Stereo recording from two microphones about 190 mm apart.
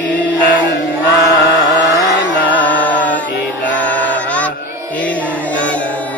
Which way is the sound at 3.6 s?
10° left (ahead or behind).